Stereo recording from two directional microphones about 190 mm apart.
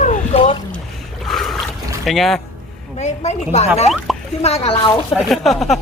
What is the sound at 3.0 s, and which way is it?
Speech, 35° left (ahead or behind).